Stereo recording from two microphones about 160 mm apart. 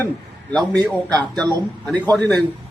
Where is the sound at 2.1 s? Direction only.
5° left (ahead or behind).